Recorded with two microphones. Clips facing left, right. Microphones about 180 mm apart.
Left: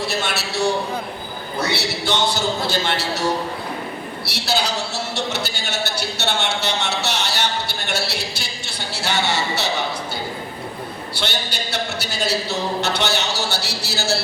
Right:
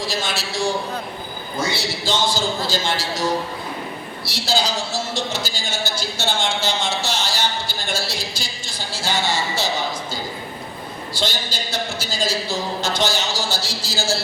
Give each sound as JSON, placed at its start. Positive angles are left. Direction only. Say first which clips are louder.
{"t": 0.1, "sound": "a man's voice", "louder": "left 1 dB", "side_deg": 65}
{"t": 4.3, "sound": "a man's voice", "louder": "right 1 dB", "side_deg": 65}
{"t": 11.1, "sound": "a man's voice", "louder": "right 2 dB", "side_deg": 65}